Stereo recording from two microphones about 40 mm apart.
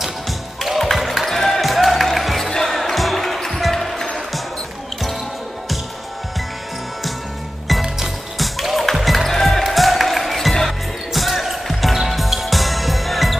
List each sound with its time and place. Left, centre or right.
0.6 s music: centre
2.5 s basketball bounce: centre
8.4 s music: centre
11.1 s basketball bounce: centre
11.6 s music: centre